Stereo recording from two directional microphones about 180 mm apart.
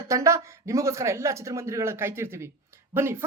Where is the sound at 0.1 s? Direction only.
15° right (ahead or behind).